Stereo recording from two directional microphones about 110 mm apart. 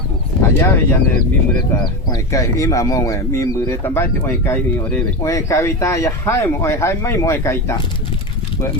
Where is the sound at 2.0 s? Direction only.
35° left (ahead or behind); by 5.0 s 10° left (ahead or behind).